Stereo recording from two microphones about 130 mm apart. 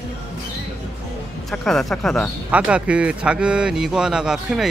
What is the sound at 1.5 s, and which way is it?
Speech, 5° left (ahead or behind).